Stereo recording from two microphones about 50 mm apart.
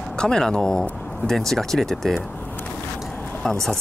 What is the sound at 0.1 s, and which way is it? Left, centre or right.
Speech, centre.